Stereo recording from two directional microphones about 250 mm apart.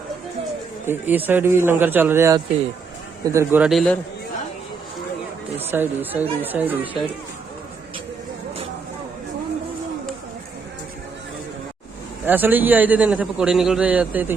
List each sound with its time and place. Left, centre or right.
0.9 s a man's voice: centre
5.7 s a man's voice: centre
12.2 s a man's voice: centre